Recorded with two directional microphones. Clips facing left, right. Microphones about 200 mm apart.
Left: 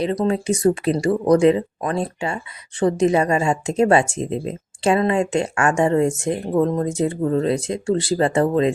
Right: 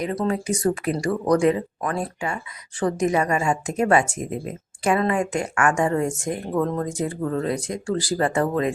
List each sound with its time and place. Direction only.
0.0 s speech: 25° left (ahead or behind)